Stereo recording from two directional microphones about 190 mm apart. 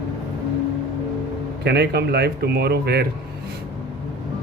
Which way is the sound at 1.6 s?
60° right (ahead or behind).